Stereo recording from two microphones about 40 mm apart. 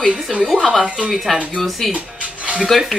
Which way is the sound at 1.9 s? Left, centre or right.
Right.